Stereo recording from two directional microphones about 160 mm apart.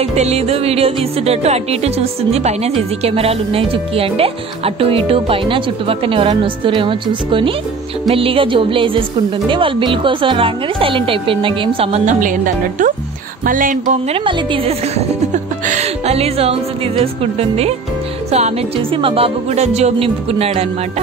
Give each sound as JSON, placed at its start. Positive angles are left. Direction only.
{"t": 0.0, "sound": "music", "side_deg": -40}
{"t": 13.5, "sound": "speech", "side_deg": -55}
{"t": 14.1, "sound": "music", "side_deg": -35}
{"t": 15.6, "sound": "a woman's voice", "side_deg": -45}
{"t": 18.3, "sound": "music", "side_deg": -40}